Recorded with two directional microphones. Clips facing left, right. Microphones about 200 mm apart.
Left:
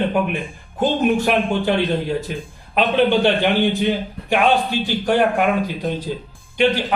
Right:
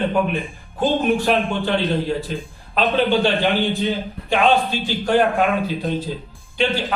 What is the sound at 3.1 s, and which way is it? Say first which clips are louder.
A man's voice: left 1 dB; 15° left (ahead or behind).